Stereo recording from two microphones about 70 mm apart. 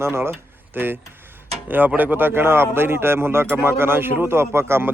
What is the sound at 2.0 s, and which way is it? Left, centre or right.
Speech, right.